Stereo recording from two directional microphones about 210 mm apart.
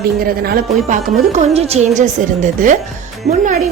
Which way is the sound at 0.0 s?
45° right (ahead or behind).